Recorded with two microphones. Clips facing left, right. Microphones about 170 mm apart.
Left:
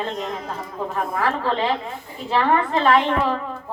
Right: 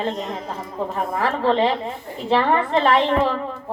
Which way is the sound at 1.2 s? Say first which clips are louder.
Right 4 dB; 30° right (ahead or behind).